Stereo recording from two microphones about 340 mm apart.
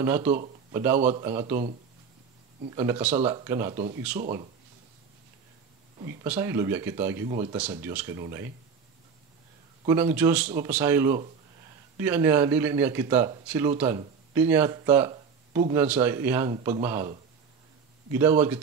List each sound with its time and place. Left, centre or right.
0.0 s speech: centre
0.3 s a sound: centre
0.7 s speech: centre
2.7 s speech: centre
6.0 s speech: centre
7.2 s speech: centre
9.8 s speech: centre
18.1 s speech: centre